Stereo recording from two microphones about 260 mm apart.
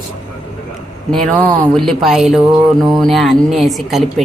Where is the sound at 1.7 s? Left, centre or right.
Centre.